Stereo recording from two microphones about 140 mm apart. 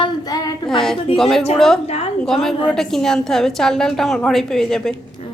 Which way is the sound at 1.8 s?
45° left (ahead or behind).